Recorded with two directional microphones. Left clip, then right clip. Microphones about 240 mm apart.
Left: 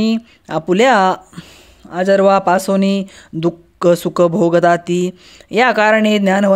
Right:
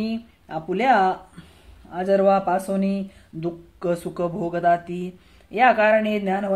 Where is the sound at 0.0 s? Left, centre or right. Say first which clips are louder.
Left 11 dB; left.